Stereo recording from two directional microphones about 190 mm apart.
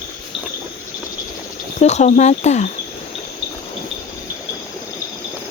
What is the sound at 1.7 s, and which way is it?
Speech, 35° left (ahead or behind).